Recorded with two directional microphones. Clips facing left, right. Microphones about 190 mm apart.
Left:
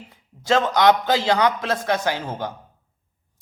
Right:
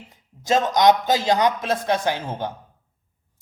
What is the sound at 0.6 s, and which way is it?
A man's voice, 20° right (ahead or behind).